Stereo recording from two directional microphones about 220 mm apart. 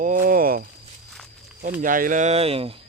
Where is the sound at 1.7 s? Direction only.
40° right (ahead or behind).